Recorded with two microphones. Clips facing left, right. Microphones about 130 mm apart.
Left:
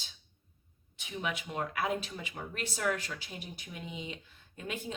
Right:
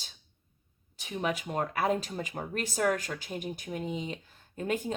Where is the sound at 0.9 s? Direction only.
40° right (ahead or behind).